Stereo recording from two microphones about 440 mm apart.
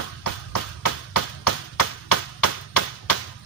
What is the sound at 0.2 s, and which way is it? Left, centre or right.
Music, left.